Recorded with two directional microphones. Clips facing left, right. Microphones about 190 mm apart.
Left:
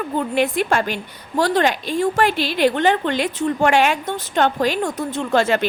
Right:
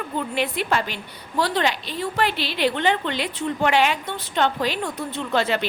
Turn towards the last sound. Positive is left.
turn(degrees=45)  # may be behind; listen again after turning